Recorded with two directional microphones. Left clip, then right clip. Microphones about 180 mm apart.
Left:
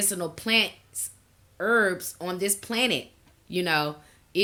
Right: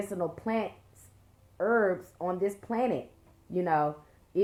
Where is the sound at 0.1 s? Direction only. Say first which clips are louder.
Left 9 dB; 35° left (ahead or behind).